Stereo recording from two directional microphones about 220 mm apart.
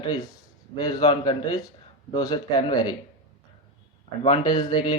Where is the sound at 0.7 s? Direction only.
20° left (ahead or behind).